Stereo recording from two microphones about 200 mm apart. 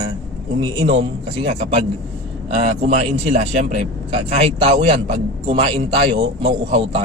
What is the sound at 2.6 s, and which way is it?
A man's voice, 30° right (ahead or behind).